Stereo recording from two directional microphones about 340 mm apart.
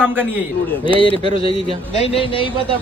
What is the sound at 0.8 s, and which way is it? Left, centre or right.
Speech, centre.